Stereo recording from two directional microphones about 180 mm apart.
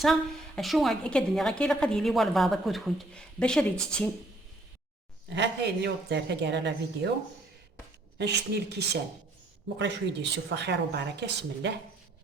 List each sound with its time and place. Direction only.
0.0 s a woman's voice: centre (ahead or behind)
5.3 s a woman's voice: 75° right (ahead or behind)
8.2 s speech: 65° right (ahead or behind)
9.7 s a woman's voice: 75° right (ahead or behind)